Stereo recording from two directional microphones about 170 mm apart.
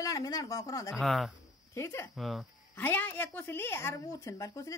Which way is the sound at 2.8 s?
10° left (ahead or behind).